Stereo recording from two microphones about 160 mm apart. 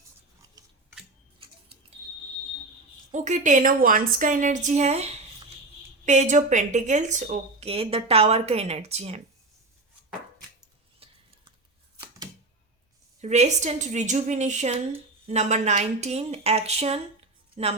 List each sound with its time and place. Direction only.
3.1 s a woman's voice: 45° right (ahead or behind)
6.1 s a woman's voice: 50° right (ahead or behind)
11.0 s a sound: 35° right (ahead or behind)
13.2 s a woman's voice: 45° right (ahead or behind)